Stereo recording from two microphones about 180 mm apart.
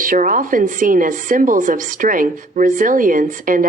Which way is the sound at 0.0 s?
50° right (ahead or behind).